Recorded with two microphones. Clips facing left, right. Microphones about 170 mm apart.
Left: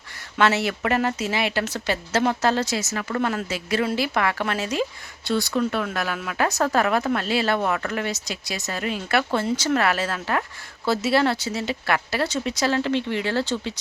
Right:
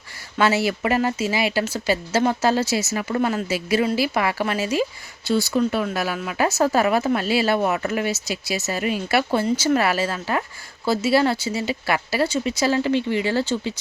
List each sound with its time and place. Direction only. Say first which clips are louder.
0.3 s speech: right 1 dB; 5° right (ahead or behind)